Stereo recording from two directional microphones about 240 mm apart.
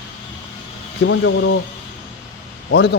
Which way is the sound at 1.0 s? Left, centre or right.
Left.